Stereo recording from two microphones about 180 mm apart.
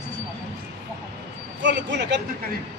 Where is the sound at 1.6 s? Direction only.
75° right (ahead or behind).